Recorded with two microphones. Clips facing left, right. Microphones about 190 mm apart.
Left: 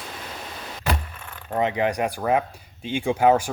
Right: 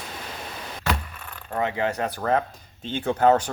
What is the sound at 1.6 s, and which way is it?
Speech, 15° left (ahead or behind).